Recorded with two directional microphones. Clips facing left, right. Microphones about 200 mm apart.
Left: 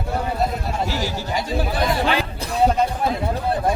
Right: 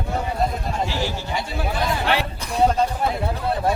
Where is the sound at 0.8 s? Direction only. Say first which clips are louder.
Even; 40° left (ahead or behind).